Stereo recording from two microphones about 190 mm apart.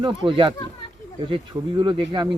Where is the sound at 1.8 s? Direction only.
25° right (ahead or behind).